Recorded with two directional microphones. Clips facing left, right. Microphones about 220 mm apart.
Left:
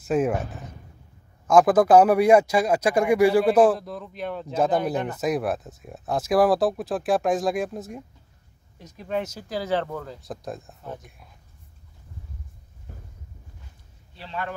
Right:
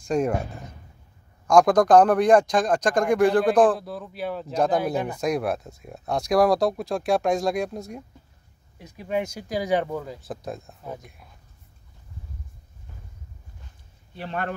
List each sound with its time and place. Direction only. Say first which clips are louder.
0.0 s speech: left 1 dB; 5° left (ahead or behind)
3.7 s speech: even; 5° right (ahead or behind)
14.1 s speech: right 3 dB; 55° right (ahead or behind)